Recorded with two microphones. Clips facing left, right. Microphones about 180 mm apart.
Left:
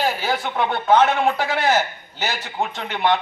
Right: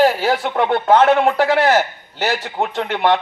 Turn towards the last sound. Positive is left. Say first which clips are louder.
# right 4 dB
turn(degrees=-65)  # may be behind; listen again after turning